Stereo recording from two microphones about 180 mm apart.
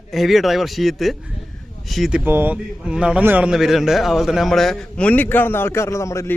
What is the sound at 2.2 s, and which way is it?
A man's voice, 10° right (ahead or behind).